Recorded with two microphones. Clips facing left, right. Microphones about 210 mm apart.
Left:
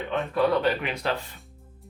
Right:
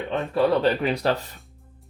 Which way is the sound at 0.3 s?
35° right (ahead or behind).